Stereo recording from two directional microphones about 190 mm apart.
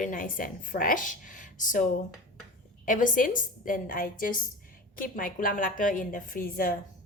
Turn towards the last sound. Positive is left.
turn(degrees=50)  # may be behind; listen again after turning